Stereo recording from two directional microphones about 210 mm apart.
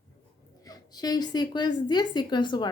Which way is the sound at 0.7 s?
20° left (ahead or behind).